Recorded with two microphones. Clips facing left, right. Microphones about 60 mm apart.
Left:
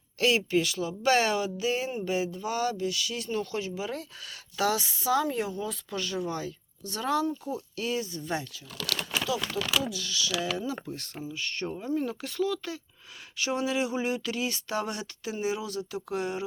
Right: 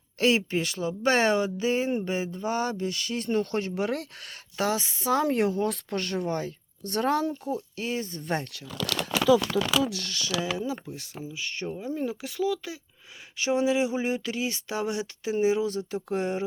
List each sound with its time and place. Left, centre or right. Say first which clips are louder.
0.2 s speech: right 1 dB; right
4.3 s speech: even; right
5.2 s a woman's voice: right 6 dB; right
7.4 s a woman's voice: right 2 dB; right
9.0 s speech: right 11 dB; right
10.4 s speech: right 1 dB; centre